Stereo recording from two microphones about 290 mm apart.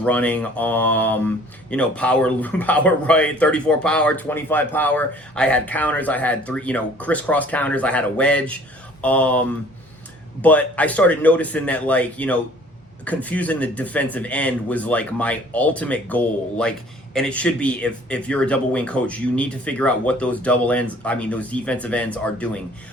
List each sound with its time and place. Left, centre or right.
0.0 s speech: centre